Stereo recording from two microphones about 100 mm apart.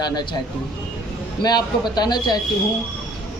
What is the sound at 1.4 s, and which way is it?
Speech, 45° left (ahead or behind).